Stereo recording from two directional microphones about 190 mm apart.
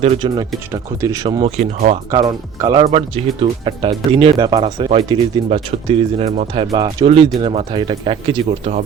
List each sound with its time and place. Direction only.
0.0 s speech: 25° right (ahead or behind)
1.5 s speech: 35° right (ahead or behind)
2.0 s speech: 15° right (ahead or behind)
2.8 s speech: 35° right (ahead or behind)